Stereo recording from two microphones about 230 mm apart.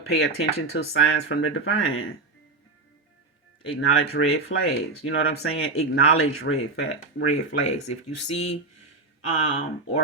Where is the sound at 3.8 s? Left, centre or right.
Left.